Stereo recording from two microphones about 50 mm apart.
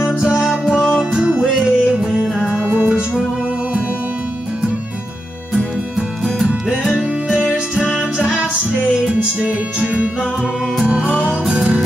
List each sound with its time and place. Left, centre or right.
0.0 s music: centre
5.5 s music: centre
8.9 s music: right